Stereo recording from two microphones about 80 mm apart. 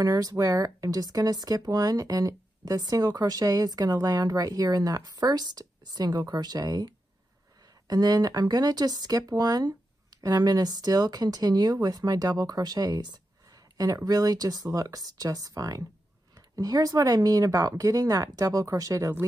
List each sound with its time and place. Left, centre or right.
0.0 s speech: right
7.9 s speech: right